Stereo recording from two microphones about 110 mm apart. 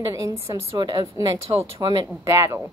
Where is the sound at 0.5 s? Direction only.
40° right (ahead or behind).